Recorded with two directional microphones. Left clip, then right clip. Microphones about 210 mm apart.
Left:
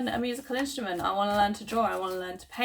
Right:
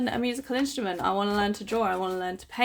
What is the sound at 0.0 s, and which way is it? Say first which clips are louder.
Speech: right 2 dB; 55° right (ahead or behind).